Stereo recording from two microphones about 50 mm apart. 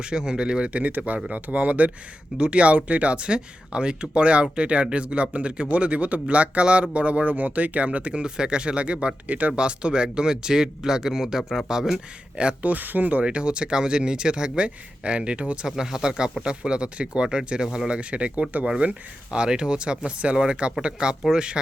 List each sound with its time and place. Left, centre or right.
0.0 s speech: centre
9.5 s speech: centre
12.4 s speech: right
13.2 s speech: centre
15.6 s speech: centre